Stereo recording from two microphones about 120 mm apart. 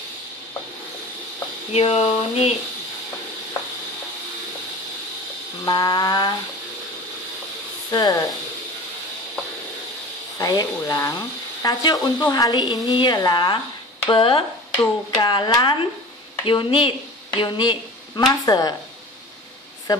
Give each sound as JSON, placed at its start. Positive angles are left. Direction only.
{"t": 1.7, "sound": "speech", "side_deg": 60}
{"t": 5.7, "sound": "a woman's voice", "side_deg": 35}
{"t": 7.9, "sound": "a woman's voice", "side_deg": 30}
{"t": 10.4, "sound": "a woman's voice", "side_deg": 30}
{"t": 14.8, "sound": "a woman's voice", "side_deg": 35}
{"t": 19.9, "sound": "speech", "side_deg": 35}